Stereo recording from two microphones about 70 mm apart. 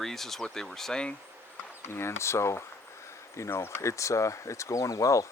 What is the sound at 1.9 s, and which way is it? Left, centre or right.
Speech, left.